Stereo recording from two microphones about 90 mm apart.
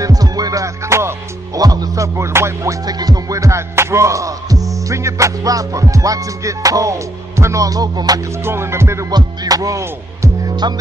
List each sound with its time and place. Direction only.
0.0 s music: 45° right (ahead or behind)
1.6 s speech: 45° right (ahead or behind)
2.1 s music: 30° right (ahead or behind); by 8.2 s 50° right (ahead or behind)
8.5 s music: 30° right (ahead or behind)
9.1 s music: 45° right (ahead or behind)